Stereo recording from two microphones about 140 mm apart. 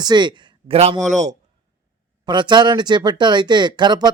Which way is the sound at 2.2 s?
35° right (ahead or behind).